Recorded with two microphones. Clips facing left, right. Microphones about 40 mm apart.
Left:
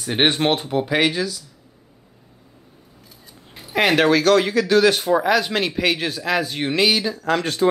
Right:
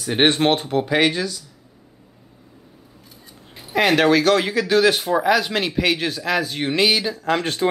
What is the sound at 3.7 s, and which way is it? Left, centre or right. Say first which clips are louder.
Speech: even; centre.